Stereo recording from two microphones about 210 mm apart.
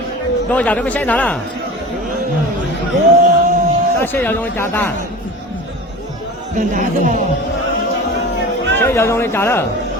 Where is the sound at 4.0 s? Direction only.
10° left (ahead or behind).